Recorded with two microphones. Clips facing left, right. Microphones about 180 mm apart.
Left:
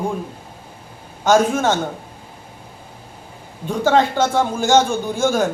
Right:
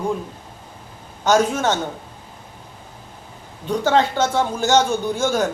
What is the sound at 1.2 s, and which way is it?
Speech, 50° left (ahead or behind).